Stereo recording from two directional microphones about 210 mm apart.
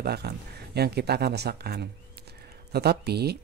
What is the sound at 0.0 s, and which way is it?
Speech, 50° right (ahead or behind).